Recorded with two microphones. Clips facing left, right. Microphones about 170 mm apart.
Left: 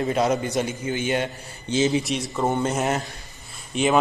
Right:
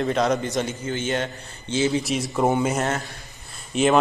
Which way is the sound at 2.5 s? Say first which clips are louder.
Left 1 dB; 5° right (ahead or behind).